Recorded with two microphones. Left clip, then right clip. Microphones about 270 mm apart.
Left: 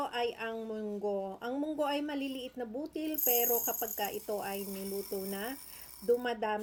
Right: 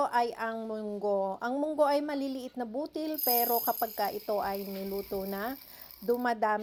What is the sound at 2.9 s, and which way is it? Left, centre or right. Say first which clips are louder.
Speech: right 2 dB; centre.